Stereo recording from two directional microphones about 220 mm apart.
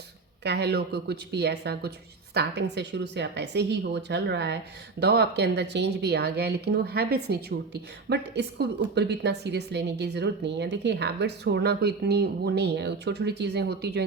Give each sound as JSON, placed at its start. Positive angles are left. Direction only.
{"t": 0.4, "sound": "a woman's voice", "side_deg": -50}